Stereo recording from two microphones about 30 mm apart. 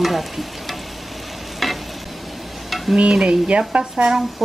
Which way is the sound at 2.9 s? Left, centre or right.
Right.